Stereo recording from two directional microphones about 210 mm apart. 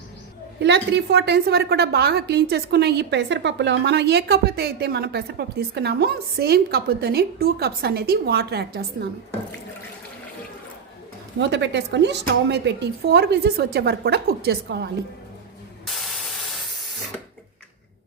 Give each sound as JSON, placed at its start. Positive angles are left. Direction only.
{"t": 0.6, "sound": "a woman's voice", "side_deg": -55}
{"t": 11.3, "sound": "a woman's voice", "side_deg": -55}